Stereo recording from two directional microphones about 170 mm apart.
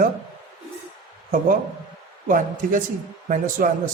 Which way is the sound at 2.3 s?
50° right (ahead or behind).